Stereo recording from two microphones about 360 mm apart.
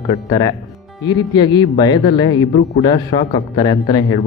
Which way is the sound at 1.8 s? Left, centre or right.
Centre.